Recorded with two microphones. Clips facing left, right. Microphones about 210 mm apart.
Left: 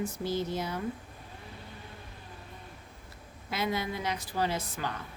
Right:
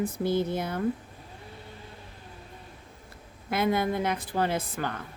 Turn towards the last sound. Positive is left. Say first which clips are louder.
# right 3 dB
turn(degrees=-55)  # may be behind; listen again after turning